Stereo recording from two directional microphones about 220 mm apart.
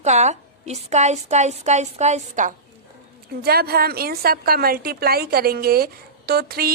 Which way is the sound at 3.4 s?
45° right (ahead or behind).